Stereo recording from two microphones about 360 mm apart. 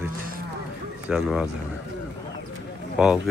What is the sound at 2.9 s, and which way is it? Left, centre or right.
Speech, centre.